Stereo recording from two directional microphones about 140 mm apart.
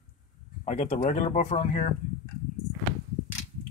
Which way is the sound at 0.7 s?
60° left (ahead or behind).